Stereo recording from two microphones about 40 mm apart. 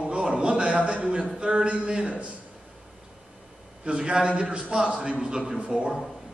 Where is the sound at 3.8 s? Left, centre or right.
Right.